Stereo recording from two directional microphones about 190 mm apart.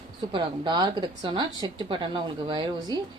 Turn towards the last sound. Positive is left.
turn(degrees=-25)  # may be behind; listen again after turning